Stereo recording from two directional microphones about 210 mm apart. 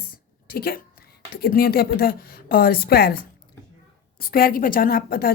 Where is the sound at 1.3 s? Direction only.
45° left (ahead or behind).